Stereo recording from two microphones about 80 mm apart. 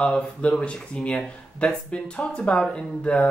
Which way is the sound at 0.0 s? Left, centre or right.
Centre.